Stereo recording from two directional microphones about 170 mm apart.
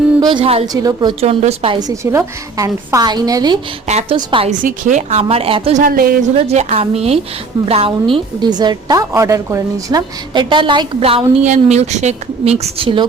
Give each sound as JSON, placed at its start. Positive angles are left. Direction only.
{"t": 0.2, "sound": "a woman's voice", "side_deg": -30}
{"t": 0.7, "sound": "a woman's voice", "side_deg": -20}
{"t": 1.2, "sound": "a woman's voice", "side_deg": -35}
{"t": 1.9, "sound": "a woman's voice", "side_deg": -20}
{"t": 3.8, "sound": "a woman's voice", "side_deg": -40}
{"t": 4.6, "sound": "a woman's voice", "side_deg": -50}
{"t": 5.8, "sound": "a woman's voice", "side_deg": -60}
{"t": 6.3, "sound": "a woman's voice", "side_deg": -40}